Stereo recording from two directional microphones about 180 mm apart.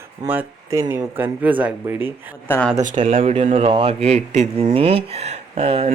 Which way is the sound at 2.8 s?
40° right (ahead or behind).